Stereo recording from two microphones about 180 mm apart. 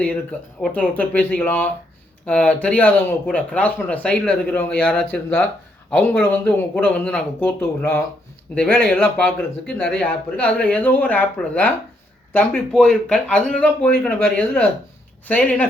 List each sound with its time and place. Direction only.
0.0 s speech: 5° left (ahead or behind)